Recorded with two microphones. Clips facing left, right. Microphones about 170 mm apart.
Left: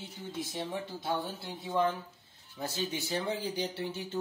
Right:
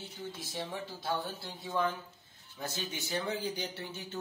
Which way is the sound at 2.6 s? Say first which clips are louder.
Left 4 dB; 30° left (ahead or behind).